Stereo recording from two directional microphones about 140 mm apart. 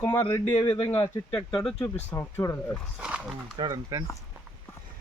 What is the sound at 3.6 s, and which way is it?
Speech, 30° right (ahead or behind).